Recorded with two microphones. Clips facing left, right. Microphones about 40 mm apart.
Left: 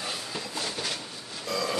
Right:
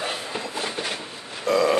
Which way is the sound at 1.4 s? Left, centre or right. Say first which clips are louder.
Right 10 dB; right.